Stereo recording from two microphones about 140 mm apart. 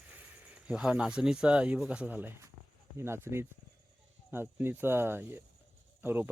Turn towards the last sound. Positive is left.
turn(degrees=-15)  # may be behind; listen again after turning